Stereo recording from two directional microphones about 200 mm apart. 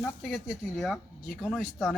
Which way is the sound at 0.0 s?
5° left (ahead or behind).